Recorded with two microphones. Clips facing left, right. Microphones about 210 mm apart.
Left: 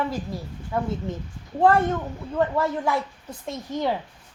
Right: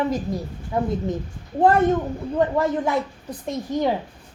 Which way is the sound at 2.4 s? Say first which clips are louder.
Right 3 dB; 20° right (ahead or behind).